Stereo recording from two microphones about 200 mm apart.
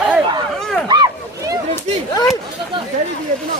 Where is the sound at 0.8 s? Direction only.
20° right (ahead or behind).